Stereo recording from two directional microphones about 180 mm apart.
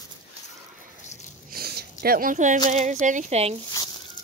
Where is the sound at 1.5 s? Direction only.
55° right (ahead or behind).